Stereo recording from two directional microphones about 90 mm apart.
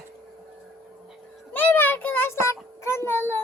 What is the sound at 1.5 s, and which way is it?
A child's voice, 20° left (ahead or behind).